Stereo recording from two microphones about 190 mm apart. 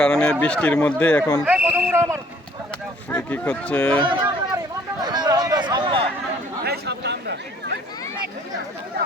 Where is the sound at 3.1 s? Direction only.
10° left (ahead or behind).